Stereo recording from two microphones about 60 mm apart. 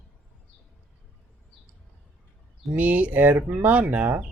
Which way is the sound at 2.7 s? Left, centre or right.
Right.